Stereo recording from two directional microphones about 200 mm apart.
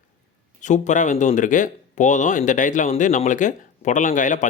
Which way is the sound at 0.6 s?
35° left (ahead or behind).